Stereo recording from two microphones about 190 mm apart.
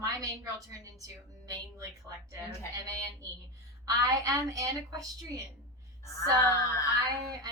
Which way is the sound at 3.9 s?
20° right (ahead or behind).